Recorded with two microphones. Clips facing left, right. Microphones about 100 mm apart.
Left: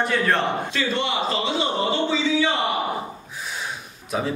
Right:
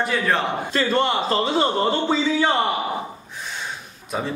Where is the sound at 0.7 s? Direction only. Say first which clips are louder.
Right 4 dB; 45° right (ahead or behind).